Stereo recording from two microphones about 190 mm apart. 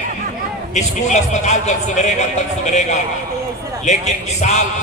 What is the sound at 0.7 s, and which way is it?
A man's voice, 40° left (ahead or behind).